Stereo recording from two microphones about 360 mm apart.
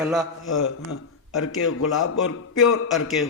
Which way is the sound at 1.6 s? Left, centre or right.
Left.